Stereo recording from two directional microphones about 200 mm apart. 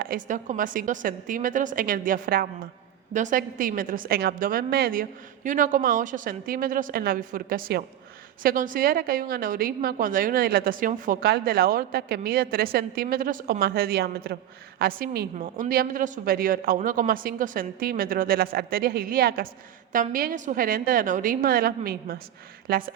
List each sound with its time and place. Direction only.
0.0 s a woman's voice: 45° right (ahead or behind)